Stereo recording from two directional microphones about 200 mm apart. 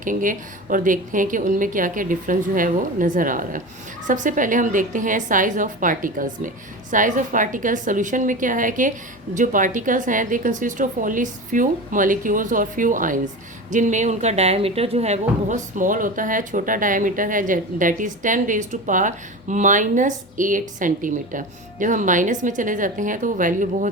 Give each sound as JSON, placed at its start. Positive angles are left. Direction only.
{"t": 0.0, "sound": "speech", "side_deg": -40}